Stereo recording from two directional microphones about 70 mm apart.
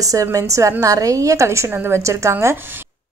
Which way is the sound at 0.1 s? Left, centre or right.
Right.